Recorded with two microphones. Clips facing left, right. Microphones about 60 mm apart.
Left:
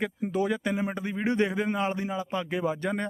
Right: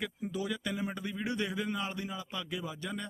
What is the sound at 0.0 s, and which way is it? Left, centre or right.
Speech, left.